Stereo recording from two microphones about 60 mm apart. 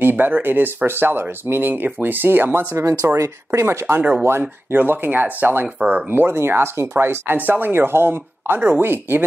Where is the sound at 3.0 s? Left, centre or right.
Right.